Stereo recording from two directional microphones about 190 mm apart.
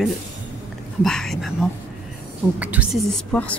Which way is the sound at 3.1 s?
5° left (ahead or behind).